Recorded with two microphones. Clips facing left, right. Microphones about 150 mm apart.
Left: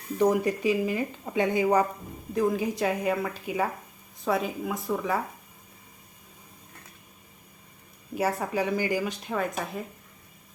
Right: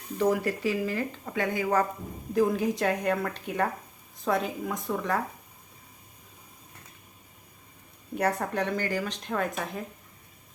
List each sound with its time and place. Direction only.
0.2 s speech: 15° left (ahead or behind)
2.3 s speech: centre (ahead or behind)
8.1 s speech: 5° left (ahead or behind)